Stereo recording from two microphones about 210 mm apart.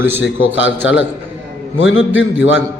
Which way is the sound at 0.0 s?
10° right (ahead or behind).